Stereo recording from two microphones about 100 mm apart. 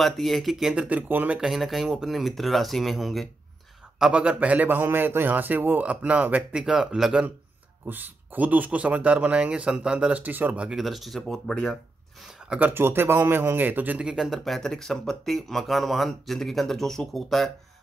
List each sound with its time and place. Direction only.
0.0 s a man's voice: centre (ahead or behind)
0.8 s speech: 15° right (ahead or behind)
1.4 s a man's voice: centre (ahead or behind)
4.0 s speech: 10° right (ahead or behind)
7.8 s speech: 20° right (ahead or behind); by 11.5 s 5° left (ahead or behind)
11.6 s a sound: centre (ahead or behind)
12.5 s a man's voice: 20° right (ahead or behind); by 17.5 s centre (ahead or behind)